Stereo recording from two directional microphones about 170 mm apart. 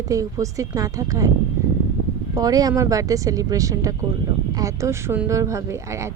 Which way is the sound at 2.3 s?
20° right (ahead or behind).